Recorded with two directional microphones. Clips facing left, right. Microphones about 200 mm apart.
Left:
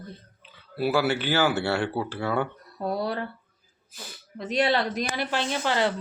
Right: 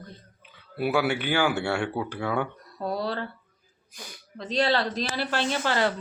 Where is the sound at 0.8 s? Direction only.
Centre (ahead or behind).